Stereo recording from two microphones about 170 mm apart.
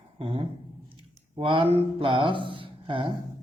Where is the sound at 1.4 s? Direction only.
30° right (ahead or behind).